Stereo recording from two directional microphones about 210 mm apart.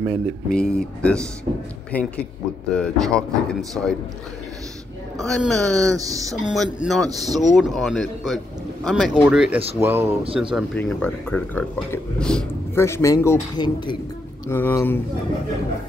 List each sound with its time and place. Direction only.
0.5 s speech: 5° left (ahead or behind)
5.2 s speech: centre (ahead or behind)
5.9 s speech: 15° right (ahead or behind)
6.5 s speech: centre (ahead or behind)
10.2 s speech: 25° right (ahead or behind)
10.5 s speech: 5° left (ahead or behind)